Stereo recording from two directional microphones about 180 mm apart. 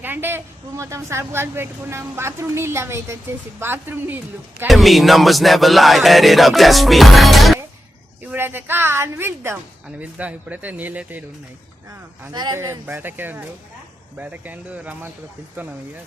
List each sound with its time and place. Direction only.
0.0 s a woman's voice: 10° right (ahead or behind)
4.7 s music: centre (ahead or behind)
8.3 s a woman's voice: 10° right (ahead or behind)
12.3 s a woman's voice: 20° right (ahead or behind)